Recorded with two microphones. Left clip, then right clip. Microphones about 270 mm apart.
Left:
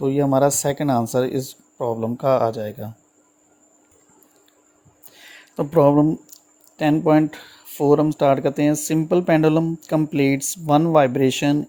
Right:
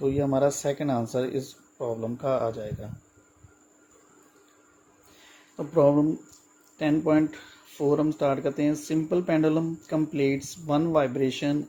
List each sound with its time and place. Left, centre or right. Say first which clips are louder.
0.0 s speech: left 6 dB; left
5.5 s speech: left 6 dB; left